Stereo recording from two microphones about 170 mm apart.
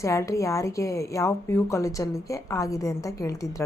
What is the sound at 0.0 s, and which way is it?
Speech, 15° left (ahead or behind).